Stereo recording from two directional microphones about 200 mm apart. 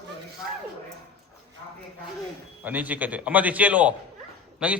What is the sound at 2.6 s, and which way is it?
A man's voice, 10° right (ahead or behind).